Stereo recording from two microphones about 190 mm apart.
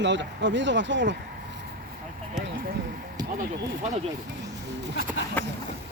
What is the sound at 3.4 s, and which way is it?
Speech, 40° right (ahead or behind).